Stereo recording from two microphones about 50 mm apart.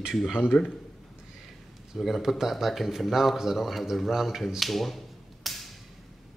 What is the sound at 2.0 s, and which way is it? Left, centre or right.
Speech, centre.